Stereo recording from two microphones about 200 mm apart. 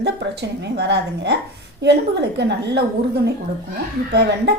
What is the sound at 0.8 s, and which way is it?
A woman's voice, 60° right (ahead or behind).